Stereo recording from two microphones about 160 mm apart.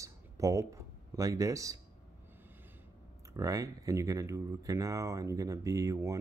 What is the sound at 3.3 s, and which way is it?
Speech, 20° right (ahead or behind).